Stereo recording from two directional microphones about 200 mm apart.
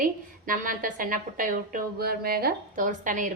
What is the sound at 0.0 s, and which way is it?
A woman's voice, 45° right (ahead or behind).